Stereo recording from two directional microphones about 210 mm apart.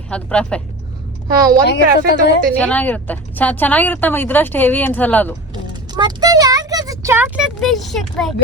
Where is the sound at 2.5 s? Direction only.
5° left (ahead or behind).